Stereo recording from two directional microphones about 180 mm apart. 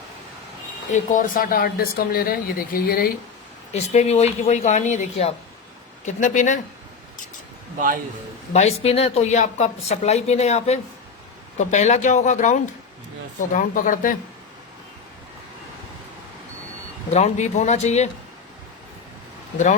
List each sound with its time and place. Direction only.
0.9 s speech: 45° left (ahead or behind)
3.7 s a woman's voice: 40° left (ahead or behind)
8.5 s a woman's voice: 35° left (ahead or behind)
17.1 s a woman's voice: 35° left (ahead or behind)